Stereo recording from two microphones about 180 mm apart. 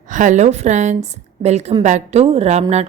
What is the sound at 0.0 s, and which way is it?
A woman's voice, 45° right (ahead or behind).